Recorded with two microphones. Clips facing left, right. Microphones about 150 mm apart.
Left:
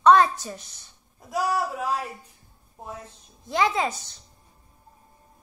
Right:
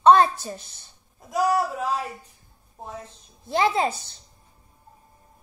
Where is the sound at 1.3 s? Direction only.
5° left (ahead or behind).